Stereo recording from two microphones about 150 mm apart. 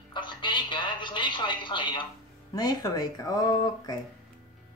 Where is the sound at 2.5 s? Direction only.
25° left (ahead or behind).